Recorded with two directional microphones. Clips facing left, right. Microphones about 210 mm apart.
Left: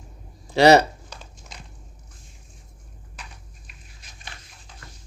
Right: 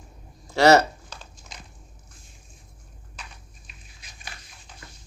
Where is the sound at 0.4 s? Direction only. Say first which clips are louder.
Left 2 dB; 15° left (ahead or behind).